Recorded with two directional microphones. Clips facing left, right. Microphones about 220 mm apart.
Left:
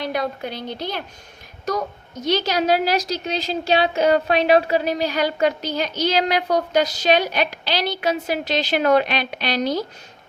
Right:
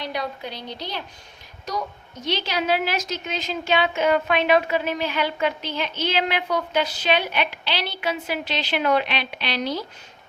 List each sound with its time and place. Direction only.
0.0 s a woman's voice: 50° left (ahead or behind)